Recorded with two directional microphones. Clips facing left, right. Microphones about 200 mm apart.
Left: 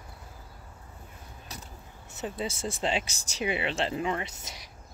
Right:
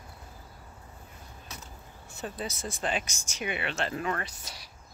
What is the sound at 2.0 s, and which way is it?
Speech, 20° left (ahead or behind).